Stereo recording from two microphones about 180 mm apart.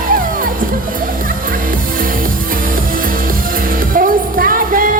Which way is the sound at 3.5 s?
50° right (ahead or behind).